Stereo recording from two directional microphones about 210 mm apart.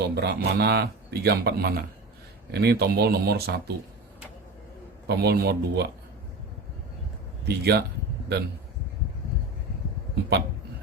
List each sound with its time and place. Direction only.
0.0 s speech: 50° right (ahead or behind)
5.0 s speech: 50° right (ahead or behind)
7.4 s speech: 50° right (ahead or behind)